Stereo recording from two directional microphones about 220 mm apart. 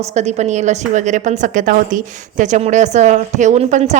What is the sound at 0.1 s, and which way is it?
A woman's voice, 30° right (ahead or behind).